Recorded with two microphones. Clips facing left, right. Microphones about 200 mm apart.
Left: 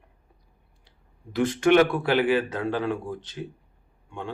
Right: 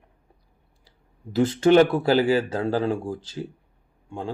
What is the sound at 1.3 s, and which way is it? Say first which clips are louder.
Speech: right 3 dB; 25° right (ahead or behind).